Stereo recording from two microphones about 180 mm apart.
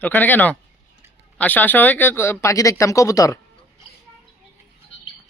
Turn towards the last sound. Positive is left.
turn(degrees=20)  # may be behind; listen again after turning